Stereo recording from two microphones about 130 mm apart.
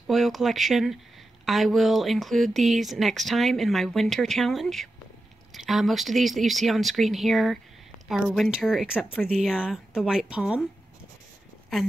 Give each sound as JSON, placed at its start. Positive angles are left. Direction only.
{"t": 0.0, "sound": "speech", "side_deg": 0}